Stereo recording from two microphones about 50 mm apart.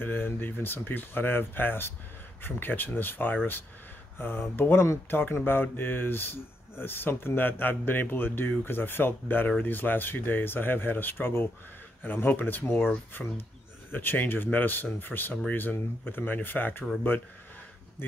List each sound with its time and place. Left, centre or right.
0.0 s speech: left
13.9 s speech: left